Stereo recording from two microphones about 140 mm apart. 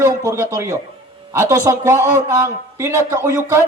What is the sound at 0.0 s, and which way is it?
A man's voice, 20° right (ahead or behind).